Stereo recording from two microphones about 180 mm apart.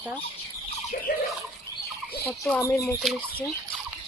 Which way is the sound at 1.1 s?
55° left (ahead or behind).